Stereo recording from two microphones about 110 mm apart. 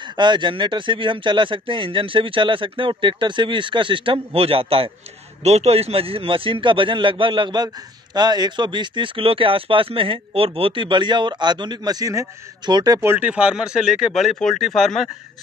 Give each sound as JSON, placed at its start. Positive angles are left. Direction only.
{"t": 0.2, "sound": "a man's voice", "side_deg": -45}
{"t": 5.4, "sound": "a man's voice", "side_deg": -80}
{"t": 13.0, "sound": "speech", "side_deg": -15}